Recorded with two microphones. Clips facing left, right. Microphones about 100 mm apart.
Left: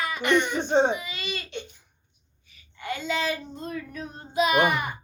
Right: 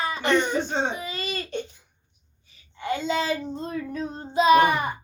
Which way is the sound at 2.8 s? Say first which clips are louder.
Right 3 dB; 30° right (ahead or behind).